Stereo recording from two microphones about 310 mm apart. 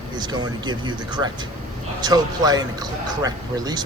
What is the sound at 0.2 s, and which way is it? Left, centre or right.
Speech, centre.